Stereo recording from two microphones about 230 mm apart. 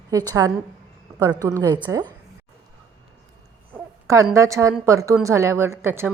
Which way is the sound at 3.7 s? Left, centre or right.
Centre.